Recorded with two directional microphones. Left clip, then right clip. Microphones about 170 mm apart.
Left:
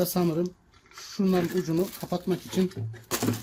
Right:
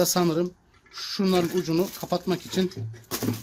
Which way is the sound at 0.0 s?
70° right (ahead or behind).